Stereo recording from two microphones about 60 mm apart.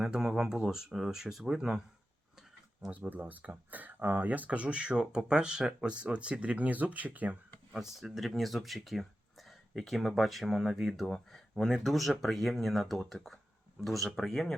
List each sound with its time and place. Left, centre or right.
0.0 s speech: centre
2.9 s speech: right
7.7 s speech: centre